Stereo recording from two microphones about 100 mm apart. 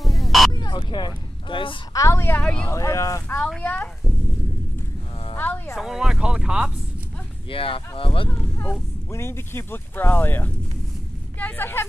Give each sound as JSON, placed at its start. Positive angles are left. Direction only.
{"t": 0.0, "sound": "vehicle", "side_deg": 0}
{"t": 0.5, "sound": "speech", "side_deg": 45}
{"t": 2.0, "sound": "speech", "side_deg": 30}
{"t": 2.4, "sound": "speech", "side_deg": 10}
{"t": 2.7, "sound": "speech", "side_deg": 30}
{"t": 3.6, "sound": "speech", "side_deg": 15}
{"t": 5.3, "sound": "insect", "side_deg": 20}
{"t": 5.8, "sound": "speech", "side_deg": -5}
{"t": 7.4, "sound": "speech", "side_deg": 65}
{"t": 8.5, "sound": "speech", "side_deg": 25}